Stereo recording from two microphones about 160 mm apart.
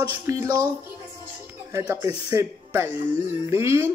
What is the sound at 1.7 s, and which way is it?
Speech, 20° right (ahead or behind).